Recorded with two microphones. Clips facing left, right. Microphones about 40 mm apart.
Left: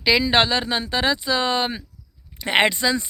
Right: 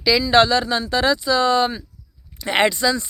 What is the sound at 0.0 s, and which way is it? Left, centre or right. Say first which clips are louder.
Speech: right 3 dB; left.